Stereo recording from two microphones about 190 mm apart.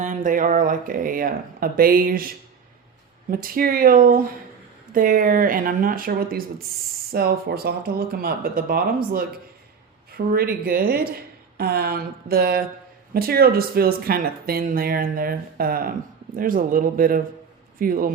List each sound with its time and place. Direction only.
0.0 s speech: 40° right (ahead or behind)
10.2 s speech: 55° right (ahead or behind)